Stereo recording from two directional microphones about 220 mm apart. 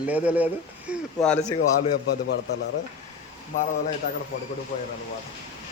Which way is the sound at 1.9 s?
45° left (ahead or behind).